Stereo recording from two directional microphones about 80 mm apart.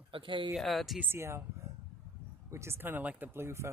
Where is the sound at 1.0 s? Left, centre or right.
Right.